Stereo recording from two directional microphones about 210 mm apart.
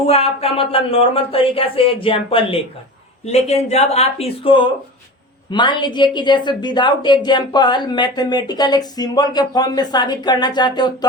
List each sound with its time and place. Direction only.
0.1 s a woman's voice: 30° left (ahead or behind)